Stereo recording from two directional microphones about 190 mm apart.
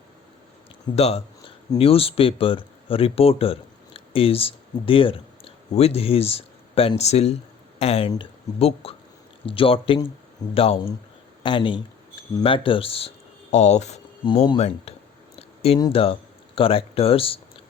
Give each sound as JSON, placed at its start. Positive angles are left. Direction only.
{"t": 0.9, "sound": "speech", "side_deg": 35}
{"t": 15.4, "sound": "a sound", "side_deg": 30}
{"t": 15.8, "sound": "speech", "side_deg": 30}